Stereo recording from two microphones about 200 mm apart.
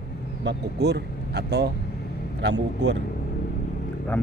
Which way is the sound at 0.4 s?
60° right (ahead or behind).